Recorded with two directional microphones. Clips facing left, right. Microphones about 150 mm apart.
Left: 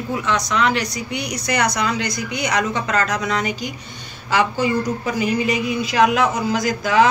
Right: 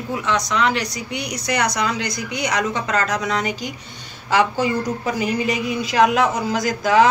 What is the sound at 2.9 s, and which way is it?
Speech, 20° right (ahead or behind).